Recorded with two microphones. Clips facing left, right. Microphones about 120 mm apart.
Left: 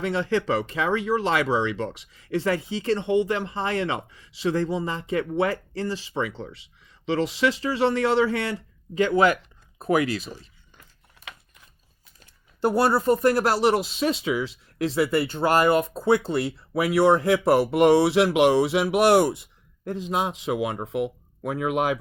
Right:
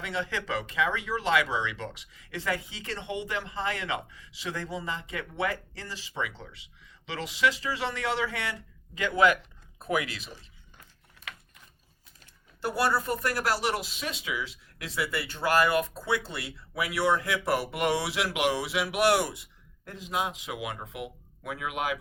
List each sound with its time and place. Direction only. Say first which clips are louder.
0.0 s speech: left 9 dB; 35° left (ahead or behind)
11.3 s a sound: left 1 dB; 25° left (ahead or behind)
12.6 s speech: left 7 dB; 30° left (ahead or behind)